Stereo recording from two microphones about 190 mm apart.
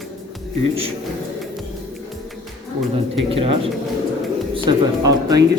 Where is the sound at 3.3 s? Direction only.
30° right (ahead or behind).